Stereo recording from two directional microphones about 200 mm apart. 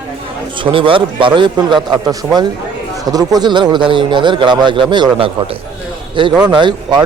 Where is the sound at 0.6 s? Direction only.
25° right (ahead or behind).